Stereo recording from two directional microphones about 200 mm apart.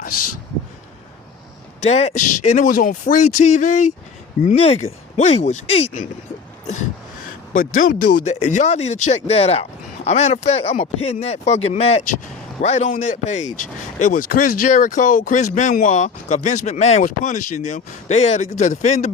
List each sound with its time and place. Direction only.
1.8 s speech: 30° left (ahead or behind)
7.5 s speech: 40° left (ahead or behind)